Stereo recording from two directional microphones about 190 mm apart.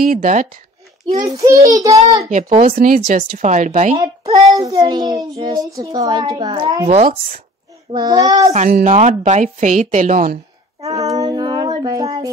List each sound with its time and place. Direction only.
0.0 s speech: 45° right (ahead or behind)
1.2 s a child's voice: 20° right (ahead or behind)
2.2 s speech: 40° right (ahead or behind)
4.5 s a child's voice: 20° right (ahead or behind)
6.9 s speech: 35° right (ahead or behind)
7.9 s a child's voice: 20° right (ahead or behind)
8.5 s a woman's voice: 45° right (ahead or behind)
10.9 s child singing: 20° right (ahead or behind)